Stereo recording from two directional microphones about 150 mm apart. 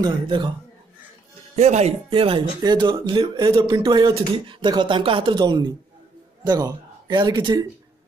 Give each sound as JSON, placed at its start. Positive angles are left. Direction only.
{"t": 0.0, "sound": "speech", "side_deg": -30}
{"t": 1.6, "sound": "speech", "side_deg": -45}